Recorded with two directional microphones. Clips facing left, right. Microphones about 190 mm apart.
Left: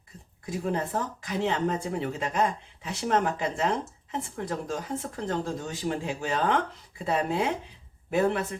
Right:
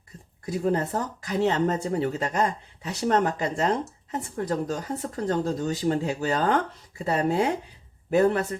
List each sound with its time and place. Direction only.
0.6 s speech: 40° right (ahead or behind)